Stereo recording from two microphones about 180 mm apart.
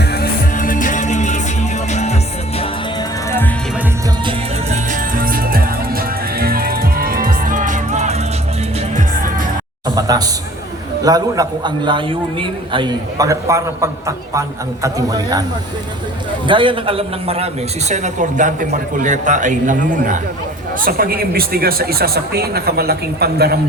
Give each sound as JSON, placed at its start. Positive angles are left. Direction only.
{"t": 0.0, "sound": "music", "side_deg": 65}
{"t": 0.5, "sound": "music", "side_deg": 45}
{"t": 3.2, "sound": "music", "side_deg": 10}
{"t": 4.3, "sound": "music", "side_deg": -40}
{"t": 9.9, "sound": "a sound", "side_deg": -20}
{"t": 11.0, "sound": "a man's voice", "side_deg": -20}
{"t": 16.5, "sound": "a man's voice", "side_deg": -30}